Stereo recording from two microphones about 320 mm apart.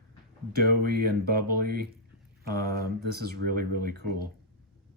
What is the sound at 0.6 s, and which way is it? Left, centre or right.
Speech, right.